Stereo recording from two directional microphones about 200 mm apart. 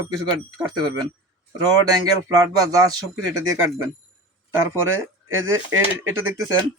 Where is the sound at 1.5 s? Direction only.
15° right (ahead or behind).